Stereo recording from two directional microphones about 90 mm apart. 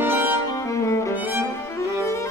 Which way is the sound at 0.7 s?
35° left (ahead or behind).